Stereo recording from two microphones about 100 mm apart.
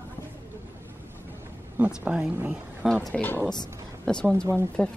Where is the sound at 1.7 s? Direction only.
15° right (ahead or behind).